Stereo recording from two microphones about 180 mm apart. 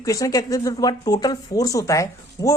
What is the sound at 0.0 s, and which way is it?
A woman's voice, 20° left (ahead or behind).